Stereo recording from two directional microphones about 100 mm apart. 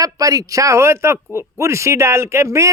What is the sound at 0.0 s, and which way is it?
Speech, 35° right (ahead or behind).